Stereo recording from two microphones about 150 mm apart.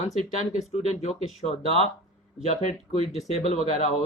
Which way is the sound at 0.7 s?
50° left (ahead or behind).